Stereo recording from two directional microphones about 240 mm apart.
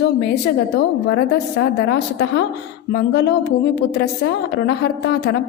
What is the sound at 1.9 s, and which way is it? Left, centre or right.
A woman's voice, left.